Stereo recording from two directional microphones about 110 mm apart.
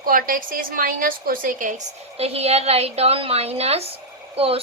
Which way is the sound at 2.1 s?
70° right (ahead or behind).